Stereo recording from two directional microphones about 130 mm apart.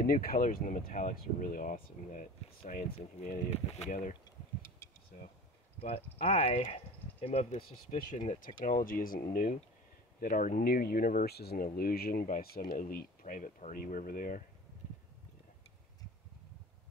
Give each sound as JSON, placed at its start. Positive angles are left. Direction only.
{"t": 0.2, "sound": "speech", "side_deg": 90}
{"t": 2.7, "sound": "speech", "side_deg": 75}
{"t": 4.6, "sound": "tick", "side_deg": 20}
{"t": 5.8, "sound": "speech", "side_deg": 50}
{"t": 8.1, "sound": "speech", "side_deg": 80}